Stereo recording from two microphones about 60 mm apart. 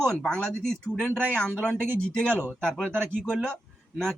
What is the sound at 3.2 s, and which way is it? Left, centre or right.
Speech, centre.